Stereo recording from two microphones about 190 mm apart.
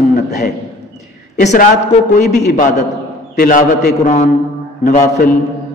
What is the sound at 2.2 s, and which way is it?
A man's voice, 60° left (ahead or behind).